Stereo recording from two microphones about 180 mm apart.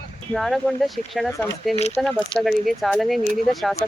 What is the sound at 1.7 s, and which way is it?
Speech, 40° left (ahead or behind).